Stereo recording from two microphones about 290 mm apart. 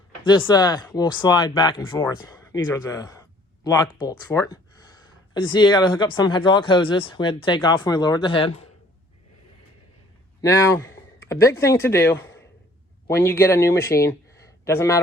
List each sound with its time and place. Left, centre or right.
0.3 s speech: centre
10.4 s speech: centre